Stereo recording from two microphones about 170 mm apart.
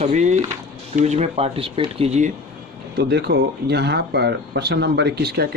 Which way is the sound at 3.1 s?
75° right (ahead or behind).